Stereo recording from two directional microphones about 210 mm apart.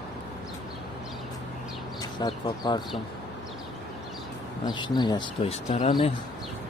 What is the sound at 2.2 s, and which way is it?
Speech, 20° left (ahead or behind).